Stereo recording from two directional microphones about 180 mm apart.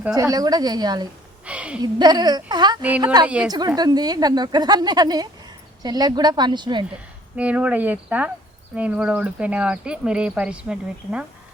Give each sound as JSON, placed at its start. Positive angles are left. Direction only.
{"t": 0.1, "sound": "a woman's voice", "side_deg": -20}
{"t": 1.5, "sound": "a sound", "side_deg": -5}
{"t": 1.8, "sound": "a woman's voice", "side_deg": -25}
{"t": 3.2, "sound": "speech", "side_deg": -5}
{"t": 3.8, "sound": "a woman's voice", "side_deg": -20}
{"t": 7.3, "sound": "speech", "side_deg": -5}